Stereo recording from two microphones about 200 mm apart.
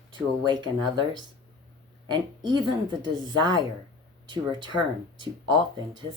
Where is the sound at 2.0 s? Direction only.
20° right (ahead or behind).